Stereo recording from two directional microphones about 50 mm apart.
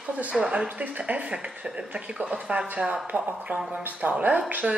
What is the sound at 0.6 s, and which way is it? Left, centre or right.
Speech, right.